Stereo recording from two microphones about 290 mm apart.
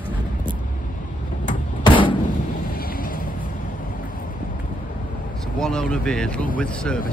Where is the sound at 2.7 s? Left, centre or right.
Left.